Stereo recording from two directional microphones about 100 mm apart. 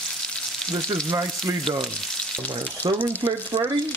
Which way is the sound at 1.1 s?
40° right (ahead or behind).